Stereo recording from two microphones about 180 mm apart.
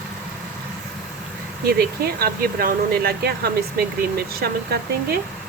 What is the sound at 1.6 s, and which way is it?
Speech, 55° right (ahead or behind).